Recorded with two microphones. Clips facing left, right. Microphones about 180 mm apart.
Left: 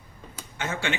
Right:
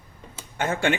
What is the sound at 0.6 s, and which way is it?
Speech, 50° right (ahead or behind).